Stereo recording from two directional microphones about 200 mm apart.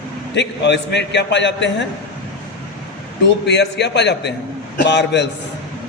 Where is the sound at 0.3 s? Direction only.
60° left (ahead or behind).